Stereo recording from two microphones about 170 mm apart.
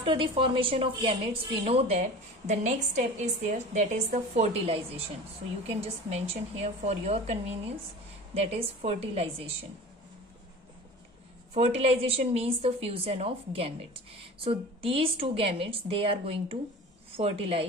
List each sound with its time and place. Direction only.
0.0 s a woman's voice: 30° right (ahead or behind)
11.5 s a woman's voice: 35° right (ahead or behind)